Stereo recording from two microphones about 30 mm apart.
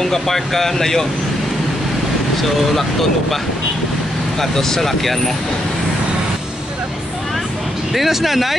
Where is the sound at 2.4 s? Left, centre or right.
Centre.